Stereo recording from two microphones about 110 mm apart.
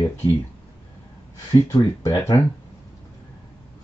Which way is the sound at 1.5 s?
30° left (ahead or behind).